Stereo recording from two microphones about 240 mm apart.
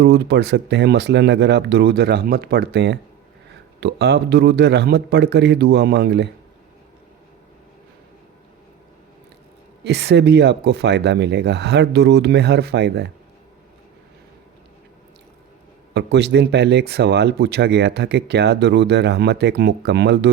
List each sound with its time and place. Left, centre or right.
0.0 s speech: right
9.8 s speech: right
16.0 s speech: right